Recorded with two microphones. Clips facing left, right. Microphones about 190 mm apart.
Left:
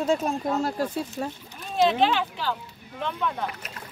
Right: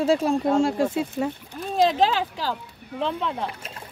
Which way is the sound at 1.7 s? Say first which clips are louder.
Right 1 dB; 40° right (ahead or behind).